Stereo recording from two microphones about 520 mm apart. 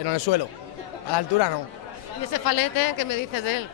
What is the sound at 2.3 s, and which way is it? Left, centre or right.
Speech, left.